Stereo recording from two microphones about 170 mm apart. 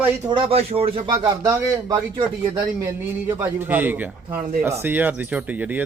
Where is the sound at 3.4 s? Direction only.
10° right (ahead or behind).